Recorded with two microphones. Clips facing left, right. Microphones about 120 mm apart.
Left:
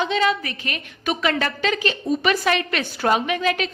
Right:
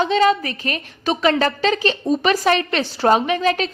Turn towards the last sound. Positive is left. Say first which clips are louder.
# right 3 dB
turn(degrees=-35)  # may be behind; listen again after turning